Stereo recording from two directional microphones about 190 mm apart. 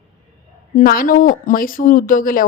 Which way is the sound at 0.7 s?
50° left (ahead or behind).